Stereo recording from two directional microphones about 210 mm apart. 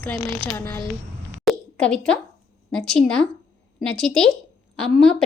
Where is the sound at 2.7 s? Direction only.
5° left (ahead or behind).